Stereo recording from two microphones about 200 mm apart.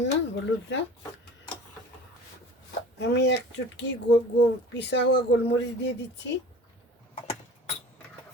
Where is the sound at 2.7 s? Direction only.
60° left (ahead or behind).